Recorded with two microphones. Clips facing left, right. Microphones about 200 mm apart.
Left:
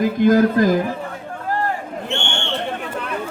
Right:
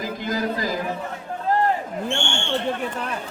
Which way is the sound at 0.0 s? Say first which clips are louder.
Left 12 dB; 55° left (ahead or behind).